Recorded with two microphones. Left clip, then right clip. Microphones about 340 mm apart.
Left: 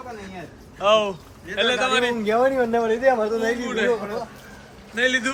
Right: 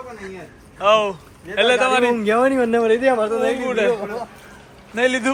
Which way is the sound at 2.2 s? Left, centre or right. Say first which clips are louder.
Right 3 dB; right.